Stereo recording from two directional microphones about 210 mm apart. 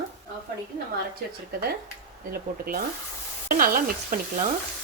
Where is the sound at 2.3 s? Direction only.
45° right (ahead or behind).